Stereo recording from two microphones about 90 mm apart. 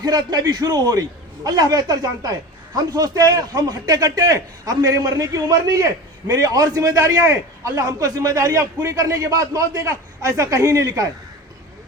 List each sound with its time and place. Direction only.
0.0 s a man's voice: 50° right (ahead or behind)